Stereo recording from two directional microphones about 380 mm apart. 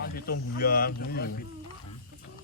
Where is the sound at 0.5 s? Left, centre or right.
Left.